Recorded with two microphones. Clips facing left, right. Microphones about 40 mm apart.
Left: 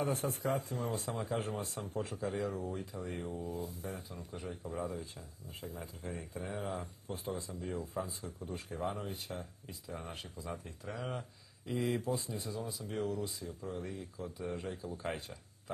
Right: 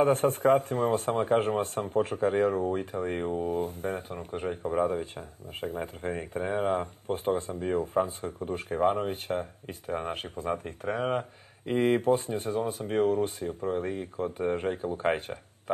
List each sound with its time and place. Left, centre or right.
0.0 s speech: right